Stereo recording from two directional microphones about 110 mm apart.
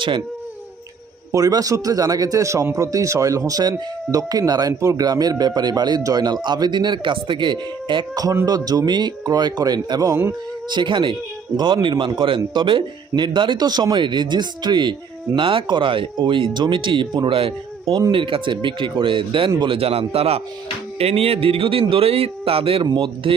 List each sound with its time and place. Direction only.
1.3 s a man's voice: 30° right (ahead or behind); by 22.9 s 55° right (ahead or behind)